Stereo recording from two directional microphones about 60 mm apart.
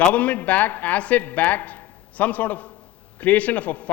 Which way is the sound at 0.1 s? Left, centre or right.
Left.